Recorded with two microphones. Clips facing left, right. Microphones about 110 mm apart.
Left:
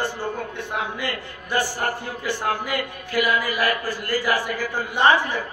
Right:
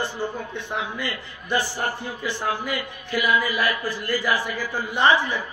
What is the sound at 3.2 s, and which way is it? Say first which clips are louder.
A man's voice: even; 45° left (ahead or behind).